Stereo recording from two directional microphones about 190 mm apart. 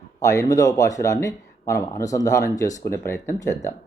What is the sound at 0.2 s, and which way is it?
Speech, 15° left (ahead or behind).